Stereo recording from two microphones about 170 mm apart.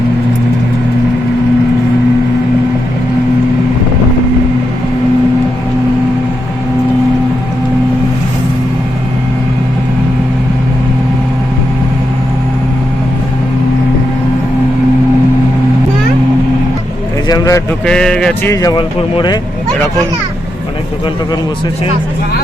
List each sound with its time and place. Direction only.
17.2 s a sound: 20° left (ahead or behind)
17.8 s speech: 5° left (ahead or behind)
18.5 s a man's voice: 25° left (ahead or behind)